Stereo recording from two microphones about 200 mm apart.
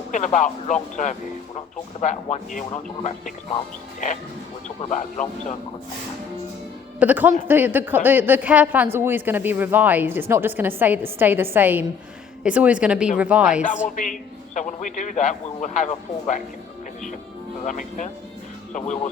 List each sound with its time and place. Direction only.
0.1 s a man's voice: 35° left (ahead or behind)
4.8 s a man's voice: 35° left (ahead or behind)
7.0 s a woman's voice: 10° right (ahead or behind)
13.8 s a man's voice: 40° left (ahead or behind)
17.7 s a man's voice: 40° left (ahead or behind)